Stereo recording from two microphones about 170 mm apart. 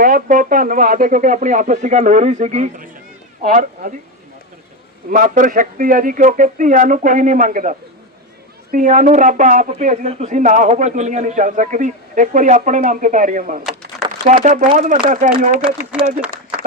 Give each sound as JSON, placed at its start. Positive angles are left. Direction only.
{"t": 0.0, "sound": "speech", "side_deg": -55}
{"t": 5.1, "sound": "speech", "side_deg": -50}
{"t": 15.9, "sound": "speech", "side_deg": -5}